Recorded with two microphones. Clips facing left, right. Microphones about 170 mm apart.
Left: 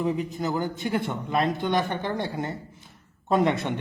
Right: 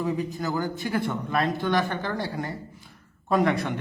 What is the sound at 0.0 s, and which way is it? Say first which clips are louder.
A man's voice: left 1 dB; 20° left (ahead or behind).